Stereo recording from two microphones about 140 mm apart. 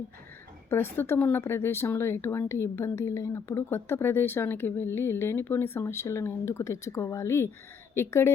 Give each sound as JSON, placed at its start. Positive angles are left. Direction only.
{"t": 0.7, "sound": "speech", "side_deg": 15}